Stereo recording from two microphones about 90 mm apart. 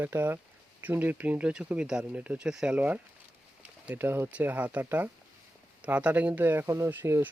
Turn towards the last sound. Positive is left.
turn(degrees=-25)  # may be behind; listen again after turning